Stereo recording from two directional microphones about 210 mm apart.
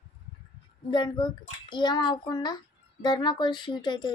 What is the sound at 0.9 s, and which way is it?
A child's voice, 20° left (ahead or behind).